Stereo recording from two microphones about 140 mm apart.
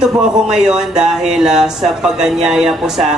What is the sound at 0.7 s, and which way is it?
Speech, 5° right (ahead or behind).